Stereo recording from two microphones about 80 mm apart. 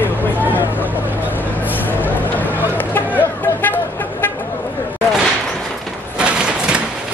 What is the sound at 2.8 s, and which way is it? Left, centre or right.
Music, left.